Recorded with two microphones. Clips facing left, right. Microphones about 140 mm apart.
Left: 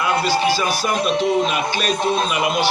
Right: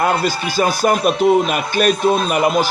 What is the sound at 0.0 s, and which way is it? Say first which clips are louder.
A man's voice: right 1 dB; 50° right (ahead or behind).